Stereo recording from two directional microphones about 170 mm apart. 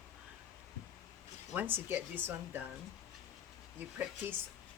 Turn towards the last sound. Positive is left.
turn(degrees=-10)  # may be behind; listen again after turning